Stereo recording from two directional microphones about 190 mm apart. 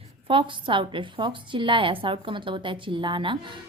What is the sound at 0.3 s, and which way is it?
A woman's voice, 25° right (ahead or behind).